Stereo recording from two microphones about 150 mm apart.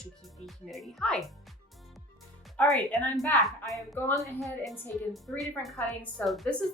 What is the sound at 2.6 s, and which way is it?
A woman's voice, 10° left (ahead or behind).